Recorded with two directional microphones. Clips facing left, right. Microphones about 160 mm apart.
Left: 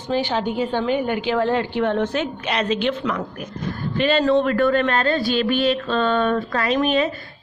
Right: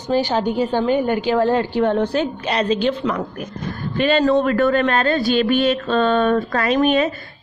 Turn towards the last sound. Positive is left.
turn(degrees=-45)  # may be behind; listen again after turning